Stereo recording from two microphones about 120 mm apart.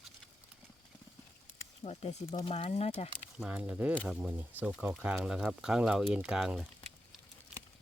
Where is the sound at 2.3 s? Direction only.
50° left (ahead or behind).